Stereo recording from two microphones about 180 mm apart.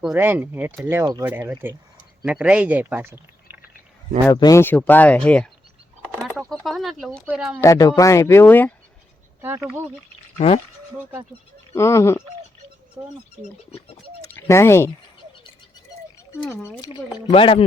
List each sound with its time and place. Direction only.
0.0 s speech: 10° right (ahead or behind)
4.3 s speech: 20° left (ahead or behind)
6.5 s speech: centre (ahead or behind)
7.6 s speech: 20° left (ahead or behind)
10.3 s speech: 35° left (ahead or behind)
11.7 s speech: 15° left (ahead or behind)
13.0 s speech: 20° right (ahead or behind)
13.7 s speech: 35° left (ahead or behind)
14.3 s speech: 15° left (ahead or behind)
16.6 s speech: 20° left (ahead or behind)